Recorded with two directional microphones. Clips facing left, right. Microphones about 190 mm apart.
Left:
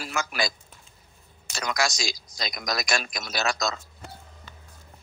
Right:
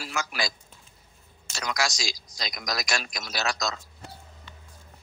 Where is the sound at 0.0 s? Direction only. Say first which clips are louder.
Left 2 dB; 55° left (ahead or behind).